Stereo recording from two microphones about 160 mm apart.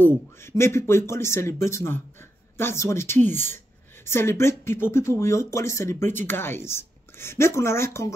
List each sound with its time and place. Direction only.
0.0 s a woman's voice: 15° left (ahead or behind)